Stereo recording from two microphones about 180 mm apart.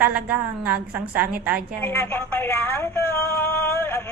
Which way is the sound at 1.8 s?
10° left (ahead or behind).